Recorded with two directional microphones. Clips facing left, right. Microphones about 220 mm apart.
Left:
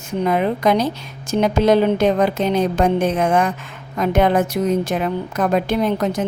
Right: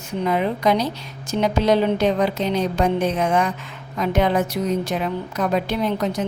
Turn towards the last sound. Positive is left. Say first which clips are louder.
# left 3 dB
turn(degrees=50)  # may be behind; listen again after turning